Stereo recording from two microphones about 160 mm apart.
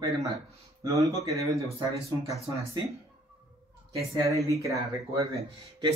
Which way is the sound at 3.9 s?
20° right (ahead or behind).